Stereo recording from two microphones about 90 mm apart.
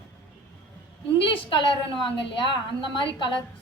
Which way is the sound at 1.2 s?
70° left (ahead or behind).